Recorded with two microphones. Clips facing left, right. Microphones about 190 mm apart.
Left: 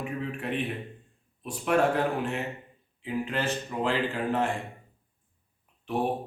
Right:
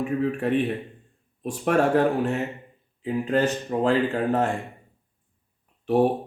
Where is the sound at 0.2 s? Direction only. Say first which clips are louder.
Right 9 dB; 40° right (ahead or behind).